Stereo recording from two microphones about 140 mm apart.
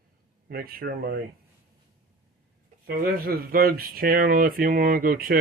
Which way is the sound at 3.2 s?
90° right.